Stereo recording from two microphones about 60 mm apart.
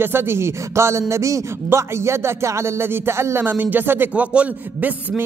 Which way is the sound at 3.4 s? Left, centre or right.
Right.